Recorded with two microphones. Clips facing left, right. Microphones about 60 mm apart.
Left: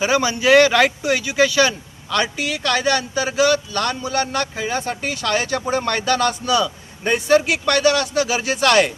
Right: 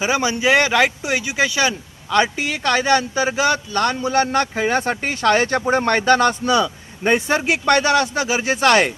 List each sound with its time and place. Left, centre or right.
0.0 s speech: centre